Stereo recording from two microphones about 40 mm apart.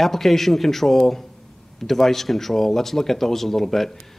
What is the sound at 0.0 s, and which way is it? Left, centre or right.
Speech, centre.